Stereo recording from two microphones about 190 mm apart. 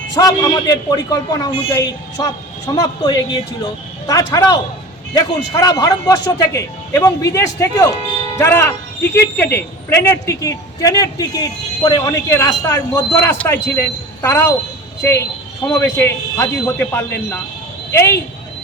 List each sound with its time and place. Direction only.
0.1 s a man's voice: 20° left (ahead or behind)
15.6 s speech: 10° left (ahead or behind)